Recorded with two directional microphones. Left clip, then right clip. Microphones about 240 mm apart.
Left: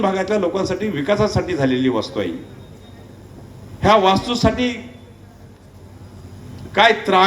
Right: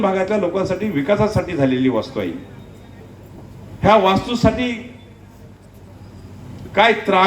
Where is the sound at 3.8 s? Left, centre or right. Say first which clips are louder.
Even; left.